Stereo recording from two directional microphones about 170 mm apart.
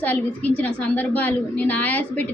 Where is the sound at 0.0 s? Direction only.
10° left (ahead or behind).